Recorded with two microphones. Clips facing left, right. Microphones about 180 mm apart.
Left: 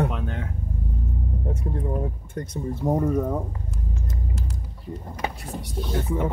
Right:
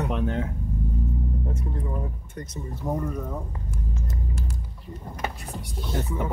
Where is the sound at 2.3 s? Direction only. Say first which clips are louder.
Left 6 dB; 50° left (ahead or behind).